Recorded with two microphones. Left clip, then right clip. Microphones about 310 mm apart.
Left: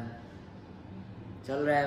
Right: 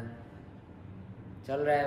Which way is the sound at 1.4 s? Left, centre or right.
Centre.